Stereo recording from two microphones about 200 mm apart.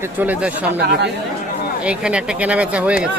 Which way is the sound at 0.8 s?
55° right (ahead or behind).